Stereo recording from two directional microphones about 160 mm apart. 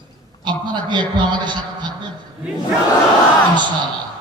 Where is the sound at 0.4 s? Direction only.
30° right (ahead or behind).